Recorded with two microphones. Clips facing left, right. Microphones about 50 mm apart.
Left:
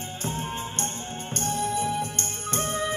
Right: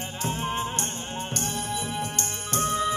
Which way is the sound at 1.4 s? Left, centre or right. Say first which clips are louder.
Left 4 dB; right.